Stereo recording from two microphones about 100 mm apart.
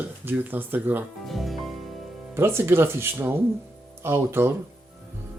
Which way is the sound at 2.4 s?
25° right (ahead or behind).